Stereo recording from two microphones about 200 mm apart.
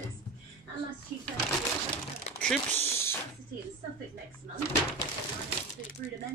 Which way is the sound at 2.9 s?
10° left (ahead or behind).